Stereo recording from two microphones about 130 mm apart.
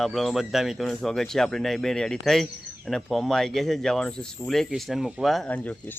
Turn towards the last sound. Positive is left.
turn(degrees=15)  # may be behind; listen again after turning